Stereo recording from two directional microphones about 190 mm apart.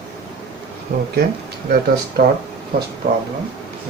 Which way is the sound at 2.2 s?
45° right (ahead or behind).